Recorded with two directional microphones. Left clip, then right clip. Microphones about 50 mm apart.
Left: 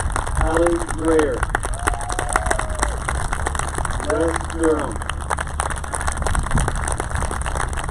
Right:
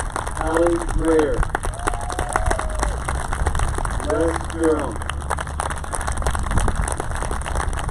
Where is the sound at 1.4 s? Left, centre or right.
Left.